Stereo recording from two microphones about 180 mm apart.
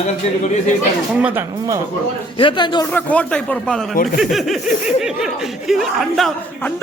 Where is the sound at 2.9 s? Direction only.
5° left (ahead or behind).